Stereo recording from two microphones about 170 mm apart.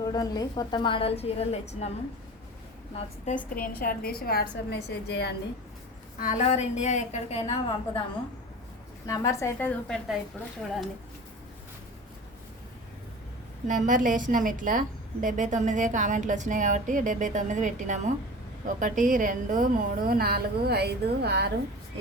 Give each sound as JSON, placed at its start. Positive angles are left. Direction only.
{"t": 0.0, "sound": "a woman's voice", "side_deg": 25}
{"t": 2.9, "sound": "a woman's voice", "side_deg": 45}
{"t": 6.1, "sound": "a woman's voice", "side_deg": 45}
{"t": 9.0, "sound": "a woman's voice", "side_deg": 20}
{"t": 13.7, "sound": "a woman's voice", "side_deg": -50}